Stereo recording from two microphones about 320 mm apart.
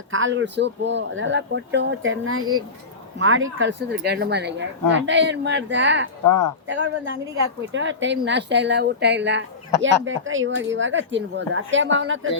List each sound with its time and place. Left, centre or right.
0.1 s speech: right
6.2 s speech: left
6.7 s speech: right